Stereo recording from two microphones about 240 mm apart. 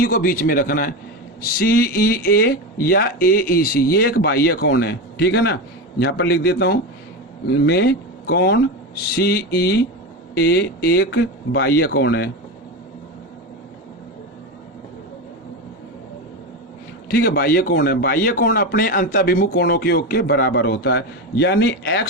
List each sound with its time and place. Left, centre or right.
0.0 s a man's voice: left
17.1 s a man's voice: left